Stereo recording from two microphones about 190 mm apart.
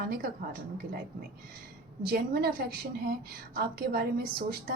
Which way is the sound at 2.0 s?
55° right (ahead or behind).